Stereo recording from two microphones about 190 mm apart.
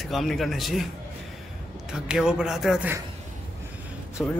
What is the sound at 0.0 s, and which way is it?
Speech, centre (ahead or behind).